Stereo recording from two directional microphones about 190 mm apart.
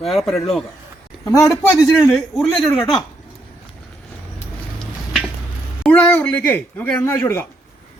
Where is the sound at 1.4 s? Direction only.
Centre (ahead or behind).